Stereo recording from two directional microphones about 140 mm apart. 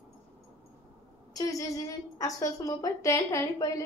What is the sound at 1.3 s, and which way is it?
A woman's voice, 25° left (ahead or behind).